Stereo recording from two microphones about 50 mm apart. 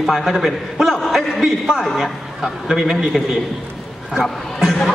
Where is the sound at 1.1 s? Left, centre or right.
Centre.